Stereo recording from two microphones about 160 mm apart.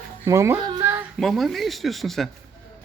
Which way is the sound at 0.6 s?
20° right (ahead or behind).